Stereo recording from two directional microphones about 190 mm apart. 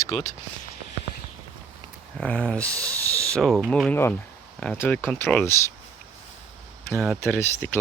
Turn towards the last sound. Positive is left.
turn(degrees=10)  # may be behind; listen again after turning